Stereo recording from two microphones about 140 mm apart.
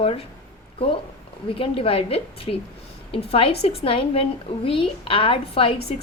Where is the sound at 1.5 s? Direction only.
40° left (ahead or behind).